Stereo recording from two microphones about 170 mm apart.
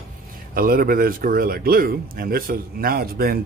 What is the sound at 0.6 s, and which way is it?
A man's voice, 60° right (ahead or behind).